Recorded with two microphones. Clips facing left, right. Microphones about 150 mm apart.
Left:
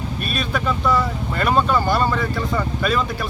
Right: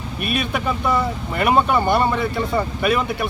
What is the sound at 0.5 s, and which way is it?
Speech, 20° right (ahead or behind).